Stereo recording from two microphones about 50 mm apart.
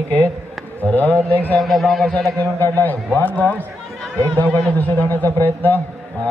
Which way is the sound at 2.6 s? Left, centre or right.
Left.